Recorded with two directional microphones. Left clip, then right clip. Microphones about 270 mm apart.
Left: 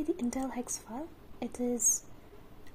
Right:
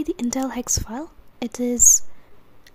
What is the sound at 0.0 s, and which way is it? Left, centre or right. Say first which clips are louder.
Speech: right 9 dB; right.